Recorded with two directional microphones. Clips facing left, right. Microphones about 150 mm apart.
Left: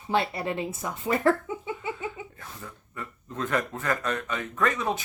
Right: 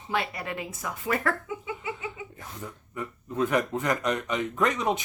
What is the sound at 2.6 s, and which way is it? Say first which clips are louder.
Speech: right 5 dB; 15° right (ahead or behind).